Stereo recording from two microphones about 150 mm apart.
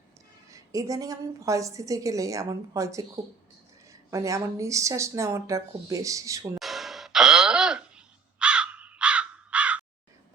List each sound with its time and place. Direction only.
0.5 s a woman's voice: 20° right (ahead or behind)
4.1 s a woman's voice: 20° right (ahead or behind)
6.6 s gasp: centre (ahead or behind)